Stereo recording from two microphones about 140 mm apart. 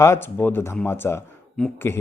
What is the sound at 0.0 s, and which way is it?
Speech, 20° left (ahead or behind).